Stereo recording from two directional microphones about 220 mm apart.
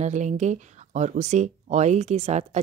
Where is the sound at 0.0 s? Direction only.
30° right (ahead or behind).